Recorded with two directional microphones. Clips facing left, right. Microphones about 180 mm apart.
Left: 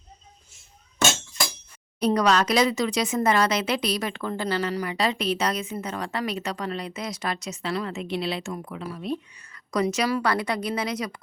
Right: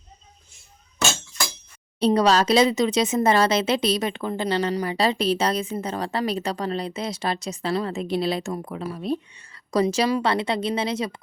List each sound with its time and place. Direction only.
2.0 s a woman's voice: 30° right (ahead or behind)